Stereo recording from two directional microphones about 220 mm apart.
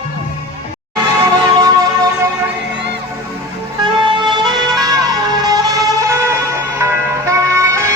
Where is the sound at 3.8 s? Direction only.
20° right (ahead or behind).